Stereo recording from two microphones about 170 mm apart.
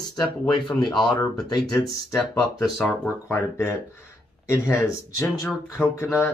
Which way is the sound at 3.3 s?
15° left (ahead or behind).